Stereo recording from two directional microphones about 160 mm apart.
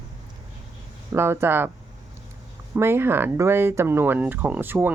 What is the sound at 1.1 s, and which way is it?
Speech, 15° right (ahead or behind).